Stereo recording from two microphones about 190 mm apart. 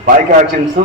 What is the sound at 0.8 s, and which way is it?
Speech, 35° right (ahead or behind).